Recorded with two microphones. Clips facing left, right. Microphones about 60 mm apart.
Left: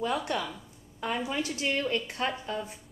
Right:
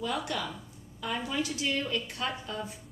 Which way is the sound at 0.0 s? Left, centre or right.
Left.